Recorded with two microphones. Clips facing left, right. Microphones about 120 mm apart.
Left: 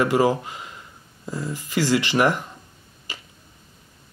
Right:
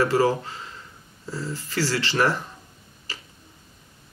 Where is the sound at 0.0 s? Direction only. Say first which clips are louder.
Left 1 dB; 15° left (ahead or behind).